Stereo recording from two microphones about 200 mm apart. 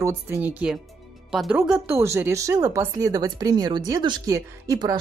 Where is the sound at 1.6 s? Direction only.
10° right (ahead or behind).